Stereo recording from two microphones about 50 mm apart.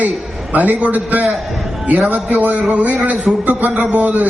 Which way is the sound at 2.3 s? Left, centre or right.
Right.